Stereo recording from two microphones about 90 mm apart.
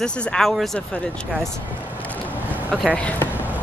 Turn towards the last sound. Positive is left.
turn(degrees=15)  # may be behind; listen again after turning